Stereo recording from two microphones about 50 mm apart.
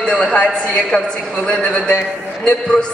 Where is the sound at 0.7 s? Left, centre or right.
Centre.